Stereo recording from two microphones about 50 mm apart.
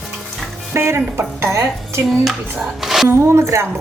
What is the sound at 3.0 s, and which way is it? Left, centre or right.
Speech, right.